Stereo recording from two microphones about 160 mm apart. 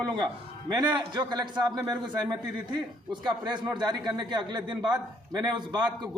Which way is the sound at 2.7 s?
25° right (ahead or behind).